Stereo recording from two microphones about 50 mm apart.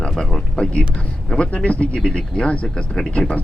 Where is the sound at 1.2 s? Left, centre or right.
Centre.